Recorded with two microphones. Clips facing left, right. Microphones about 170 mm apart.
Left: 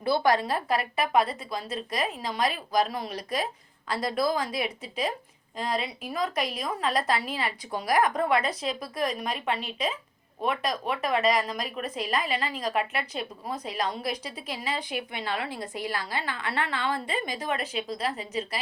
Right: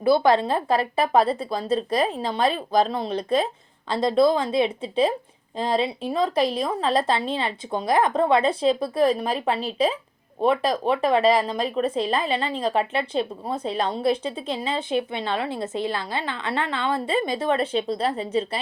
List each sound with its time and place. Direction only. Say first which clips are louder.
0.0 s speech: right 6 dB; 20° right (ahead or behind)